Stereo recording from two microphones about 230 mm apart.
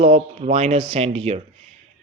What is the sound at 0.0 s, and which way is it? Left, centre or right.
Speech, right.